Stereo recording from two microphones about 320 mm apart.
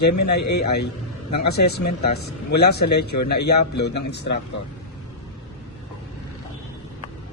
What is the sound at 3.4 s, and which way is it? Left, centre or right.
Speech, left.